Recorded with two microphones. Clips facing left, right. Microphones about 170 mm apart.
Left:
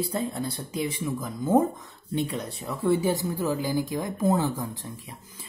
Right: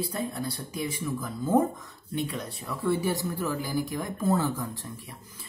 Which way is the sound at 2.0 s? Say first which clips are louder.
Left 3 dB; 30° left (ahead or behind).